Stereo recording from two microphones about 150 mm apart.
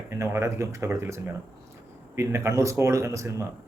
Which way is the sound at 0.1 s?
20° right (ahead or behind).